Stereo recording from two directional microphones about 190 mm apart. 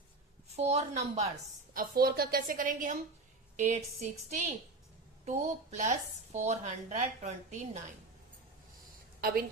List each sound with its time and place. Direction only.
0.4 s a woman's voice: 35° right (ahead or behind)
1.7 s a woman's voice: 50° right (ahead or behind)